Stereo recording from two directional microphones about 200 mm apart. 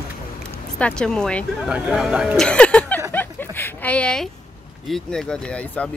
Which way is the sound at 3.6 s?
10° left (ahead or behind).